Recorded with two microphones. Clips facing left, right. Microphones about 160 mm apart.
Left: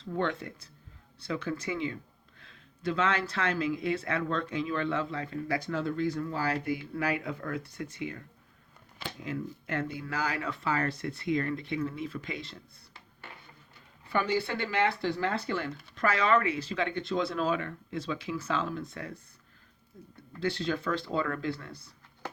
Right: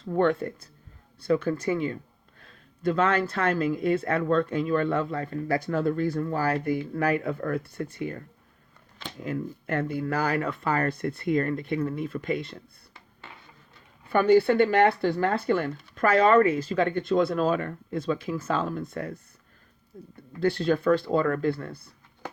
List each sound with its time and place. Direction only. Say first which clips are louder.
0.0 s speech: right 8 dB; 50° right (ahead or behind)
9.2 s speech: right 6 dB; 50° right (ahead or behind)
14.1 s speech: right 10 dB; 50° right (ahead or behind)